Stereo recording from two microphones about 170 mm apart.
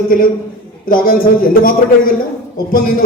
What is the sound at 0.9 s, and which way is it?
Speech, 55° left (ahead or behind).